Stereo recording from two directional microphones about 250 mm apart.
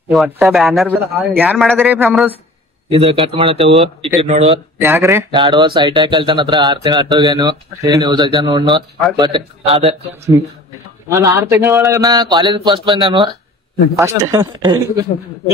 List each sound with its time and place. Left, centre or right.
0.1 s a man's voice: centre
2.9 s a man's voice: right
4.7 s a man's voice: centre
11.1 s speech: centre